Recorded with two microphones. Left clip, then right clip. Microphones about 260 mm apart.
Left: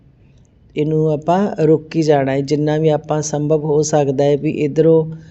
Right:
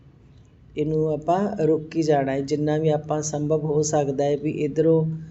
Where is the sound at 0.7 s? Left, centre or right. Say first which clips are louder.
Left 7 dB; left.